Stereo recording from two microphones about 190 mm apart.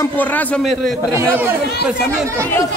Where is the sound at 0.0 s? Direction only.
10° left (ahead or behind).